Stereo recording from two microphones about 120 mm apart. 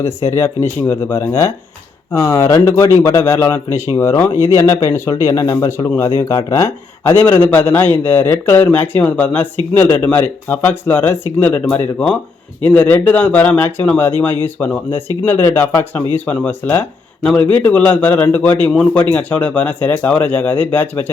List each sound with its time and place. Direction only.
0.3 s speech: 20° left (ahead or behind)
7.1 s a man's voice: 15° left (ahead or behind)